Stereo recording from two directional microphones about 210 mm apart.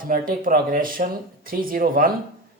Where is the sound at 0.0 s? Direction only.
40° right (ahead or behind).